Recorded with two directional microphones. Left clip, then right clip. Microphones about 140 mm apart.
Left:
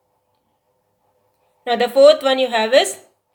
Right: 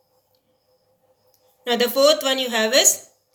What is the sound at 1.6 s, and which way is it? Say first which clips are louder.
A woman's voice: left 6 dB; 30° left (ahead or behind).